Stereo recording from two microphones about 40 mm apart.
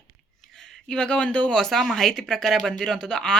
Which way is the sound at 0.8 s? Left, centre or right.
Centre.